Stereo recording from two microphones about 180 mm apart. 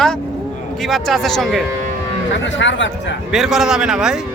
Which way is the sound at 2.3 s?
90° left.